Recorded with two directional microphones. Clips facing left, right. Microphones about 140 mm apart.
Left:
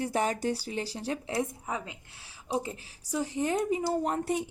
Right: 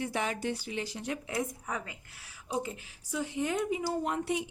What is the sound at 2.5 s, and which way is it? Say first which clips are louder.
Speech: left 2 dB; 35° left (ahead or behind).